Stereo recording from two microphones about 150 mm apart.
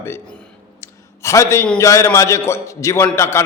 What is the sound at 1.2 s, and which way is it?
A man's voice, 20° left (ahead or behind).